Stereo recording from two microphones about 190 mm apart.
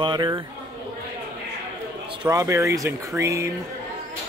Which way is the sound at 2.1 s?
20° right (ahead or behind).